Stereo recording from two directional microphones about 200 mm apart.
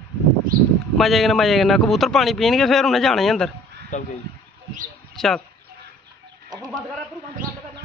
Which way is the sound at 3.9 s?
40° left (ahead or behind).